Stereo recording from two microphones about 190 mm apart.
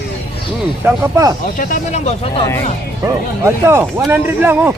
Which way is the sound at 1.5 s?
45° left (ahead or behind).